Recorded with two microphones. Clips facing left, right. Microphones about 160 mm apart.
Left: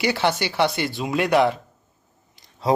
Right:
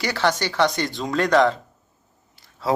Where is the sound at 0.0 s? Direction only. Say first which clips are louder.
Left 1 dB; 15° left (ahead or behind).